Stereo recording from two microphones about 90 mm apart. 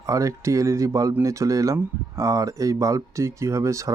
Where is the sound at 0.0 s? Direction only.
35° right (ahead or behind).